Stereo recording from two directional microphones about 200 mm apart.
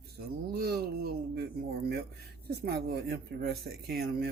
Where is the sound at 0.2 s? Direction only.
50° right (ahead or behind).